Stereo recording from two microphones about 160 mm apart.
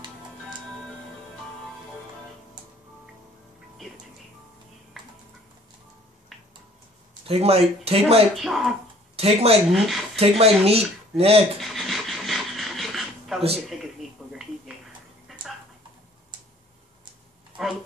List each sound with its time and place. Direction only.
7.2 s speech: 40° right (ahead or behind)
8.4 s speech: centre (ahead or behind)
9.1 s speech: 40° right (ahead or behind)
9.7 s speech: centre (ahead or behind)
10.1 s speech: 40° right (ahead or behind)
11.6 s pant: centre (ahead or behind)
14.0 s a sound: centre (ahead or behind)
15.3 s a sound: centre (ahead or behind)